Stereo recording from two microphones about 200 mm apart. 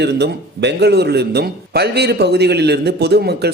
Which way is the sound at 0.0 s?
60° right (ahead or behind).